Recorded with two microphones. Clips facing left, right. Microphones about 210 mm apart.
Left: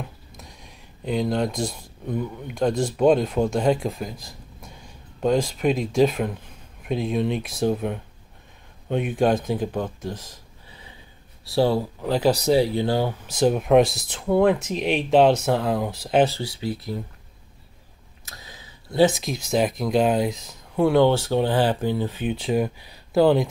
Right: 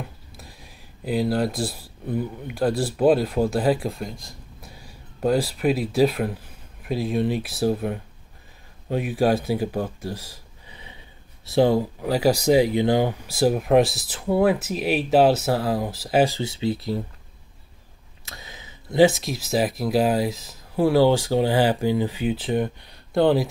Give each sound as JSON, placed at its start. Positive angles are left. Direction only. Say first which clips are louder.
{"t": 0.3, "sound": "speech", "louder": "even", "side_deg": -5}
{"t": 16.3, "sound": "speech", "louder": "right 4 dB", "side_deg": -25}
{"t": 18.2, "sound": "a sound", "louder": "right 2 dB", "side_deg": -25}
{"t": 19.0, "sound": "speech", "louder": "right 1 dB", "side_deg": 0}